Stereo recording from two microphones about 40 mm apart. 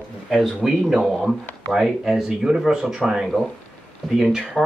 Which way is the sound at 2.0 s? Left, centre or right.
Centre.